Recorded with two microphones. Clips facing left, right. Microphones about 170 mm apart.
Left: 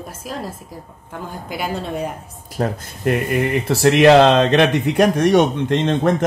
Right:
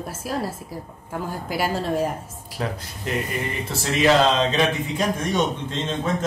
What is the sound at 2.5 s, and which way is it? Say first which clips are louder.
Speech: left 6 dB; 45° left (ahead or behind).